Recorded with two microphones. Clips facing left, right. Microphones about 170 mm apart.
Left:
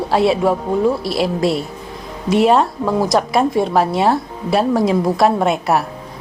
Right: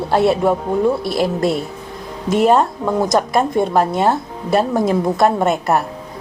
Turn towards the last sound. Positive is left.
turn(degrees=0)  # may be behind; listen again after turning